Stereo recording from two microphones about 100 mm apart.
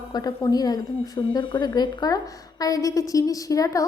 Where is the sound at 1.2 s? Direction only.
55° left (ahead or behind).